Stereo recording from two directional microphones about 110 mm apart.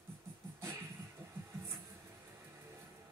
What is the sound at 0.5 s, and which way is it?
Music, 25° right (ahead or behind).